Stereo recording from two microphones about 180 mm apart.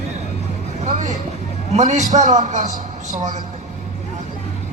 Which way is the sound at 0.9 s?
40° right (ahead or behind).